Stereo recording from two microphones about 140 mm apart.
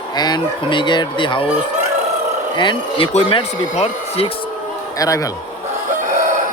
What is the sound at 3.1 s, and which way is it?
Speech, 50° left (ahead or behind).